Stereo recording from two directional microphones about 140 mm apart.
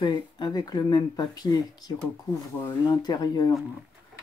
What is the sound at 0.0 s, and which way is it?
Speech, 30° left (ahead or behind).